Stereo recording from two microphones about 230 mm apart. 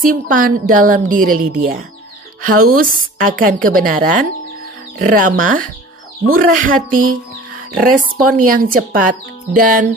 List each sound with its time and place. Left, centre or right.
0.0 s a woman's voice: right